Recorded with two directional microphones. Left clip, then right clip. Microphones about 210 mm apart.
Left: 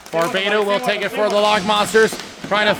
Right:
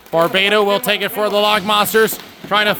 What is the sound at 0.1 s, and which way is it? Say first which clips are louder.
Speech: right 4 dB; 40° right (ahead or behind).